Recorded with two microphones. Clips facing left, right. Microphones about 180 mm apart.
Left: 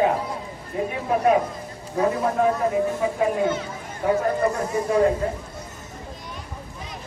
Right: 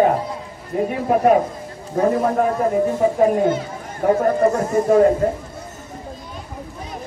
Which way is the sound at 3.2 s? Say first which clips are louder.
Right 5 dB; 45° right (ahead or behind).